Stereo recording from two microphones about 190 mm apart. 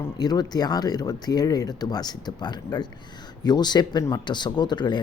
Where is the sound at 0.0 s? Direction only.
20° left (ahead or behind).